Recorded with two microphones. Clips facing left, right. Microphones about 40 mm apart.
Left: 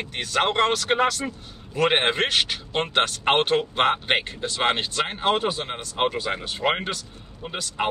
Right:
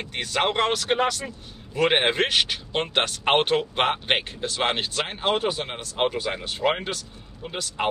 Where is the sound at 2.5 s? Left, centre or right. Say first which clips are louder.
Left 1 dB; centre.